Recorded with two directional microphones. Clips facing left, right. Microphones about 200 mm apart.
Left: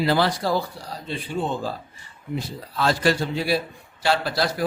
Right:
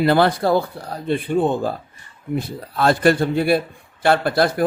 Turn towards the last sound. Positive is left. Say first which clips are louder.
# right 6 dB
turn(degrees=-55)  # may be behind; listen again after turning